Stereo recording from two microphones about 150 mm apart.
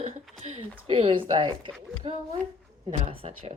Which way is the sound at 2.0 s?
45° right (ahead or behind).